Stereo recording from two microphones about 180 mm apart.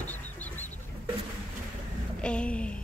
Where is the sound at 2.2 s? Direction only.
5° left (ahead or behind).